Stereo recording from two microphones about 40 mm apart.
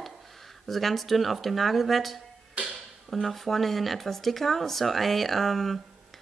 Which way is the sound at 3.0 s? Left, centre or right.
Centre.